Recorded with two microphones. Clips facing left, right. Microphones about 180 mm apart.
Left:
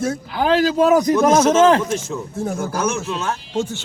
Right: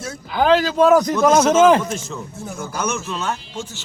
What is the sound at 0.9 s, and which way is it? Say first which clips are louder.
Speech: right 1 dB; 10° left (ahead or behind).